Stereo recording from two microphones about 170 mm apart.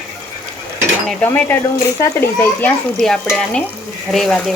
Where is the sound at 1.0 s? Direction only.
10° left (ahead or behind).